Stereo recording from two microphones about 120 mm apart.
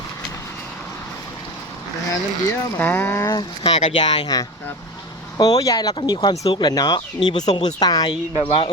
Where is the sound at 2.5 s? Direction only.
15° left (ahead or behind).